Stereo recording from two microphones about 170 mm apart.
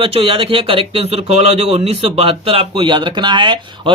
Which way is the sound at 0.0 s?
35° right (ahead or behind).